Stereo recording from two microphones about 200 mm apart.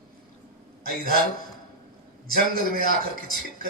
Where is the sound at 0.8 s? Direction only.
45° right (ahead or behind).